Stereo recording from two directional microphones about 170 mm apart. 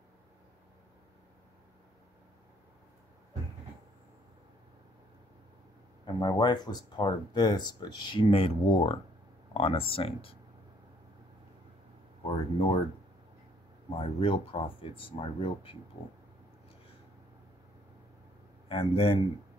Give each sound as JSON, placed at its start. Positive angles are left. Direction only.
{"t": 6.0, "sound": "speech", "side_deg": 20}
{"t": 12.3, "sound": "speech", "side_deg": 35}
{"t": 13.8, "sound": "speech", "side_deg": 35}
{"t": 18.7, "sound": "speech", "side_deg": 35}